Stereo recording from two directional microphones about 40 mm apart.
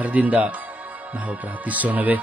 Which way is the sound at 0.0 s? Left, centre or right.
Right.